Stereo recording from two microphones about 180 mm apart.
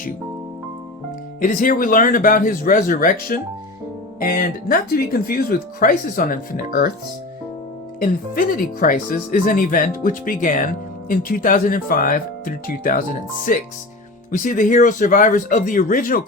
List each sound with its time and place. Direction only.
1.4 s speech: 50° left (ahead or behind)
8.0 s speech: 50° left (ahead or behind)